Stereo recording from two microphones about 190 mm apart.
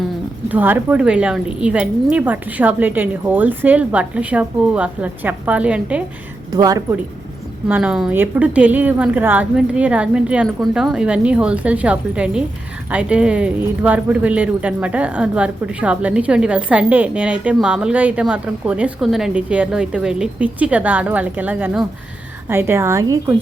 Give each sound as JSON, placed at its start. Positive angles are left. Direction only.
{"t": 0.0, "sound": "speech", "side_deg": -10}
{"t": 6.5, "sound": "a woman's voice", "side_deg": -20}
{"t": 7.7, "sound": "speech", "side_deg": -5}